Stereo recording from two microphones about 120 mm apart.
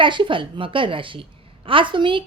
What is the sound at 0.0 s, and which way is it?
A woman's voice, 45° right (ahead or behind).